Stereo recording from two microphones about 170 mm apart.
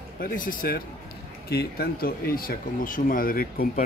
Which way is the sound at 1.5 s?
70° left (ahead or behind).